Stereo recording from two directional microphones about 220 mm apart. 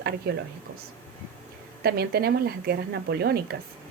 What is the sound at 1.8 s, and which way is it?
A woman's voice, 45° right (ahead or behind).